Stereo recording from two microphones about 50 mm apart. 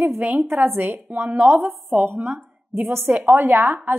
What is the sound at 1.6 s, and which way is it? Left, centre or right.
Speech, centre.